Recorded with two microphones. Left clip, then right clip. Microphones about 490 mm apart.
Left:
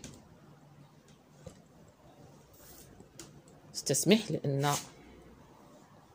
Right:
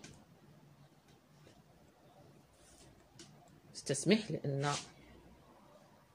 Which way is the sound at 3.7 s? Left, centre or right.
Right.